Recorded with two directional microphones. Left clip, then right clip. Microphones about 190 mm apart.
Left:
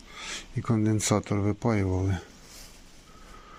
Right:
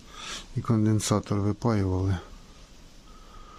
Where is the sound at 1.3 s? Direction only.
15° right (ahead or behind).